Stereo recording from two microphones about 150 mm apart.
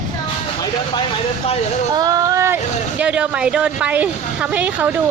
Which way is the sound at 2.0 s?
25° right (ahead or behind).